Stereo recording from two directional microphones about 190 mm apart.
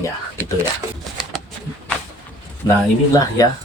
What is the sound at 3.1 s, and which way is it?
Speech, 20° left (ahead or behind).